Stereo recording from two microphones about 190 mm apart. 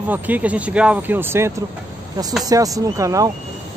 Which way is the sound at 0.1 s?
10° right (ahead or behind).